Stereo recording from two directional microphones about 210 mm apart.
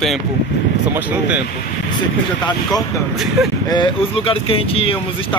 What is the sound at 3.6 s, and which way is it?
Speech, 20° left (ahead or behind).